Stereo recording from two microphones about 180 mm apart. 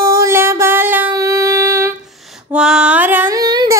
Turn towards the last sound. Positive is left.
turn(degrees=-20)  # may be behind; listen again after turning